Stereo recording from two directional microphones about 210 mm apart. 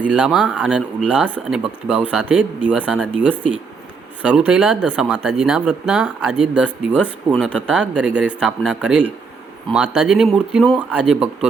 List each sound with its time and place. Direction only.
0.0 s speech: 5° right (ahead or behind)
4.3 s speech: 5° right (ahead or behind)